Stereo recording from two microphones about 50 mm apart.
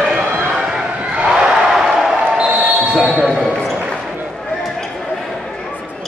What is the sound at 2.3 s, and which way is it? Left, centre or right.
Basketball bounce, right.